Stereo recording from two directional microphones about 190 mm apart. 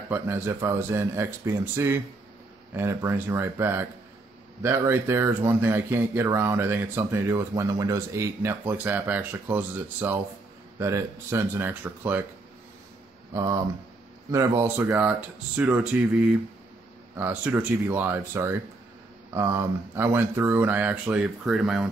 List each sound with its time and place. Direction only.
0.1 s speech: 10° right (ahead or behind)
13.3 s speech: 20° right (ahead or behind)
17.2 s speech: 10° right (ahead or behind)